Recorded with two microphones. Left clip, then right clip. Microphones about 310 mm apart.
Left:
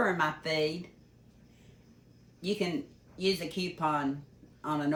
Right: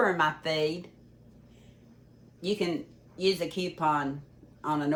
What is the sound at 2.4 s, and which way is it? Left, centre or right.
Speech, centre.